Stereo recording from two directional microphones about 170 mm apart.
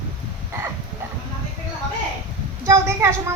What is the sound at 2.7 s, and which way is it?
Speech, 15° right (ahead or behind).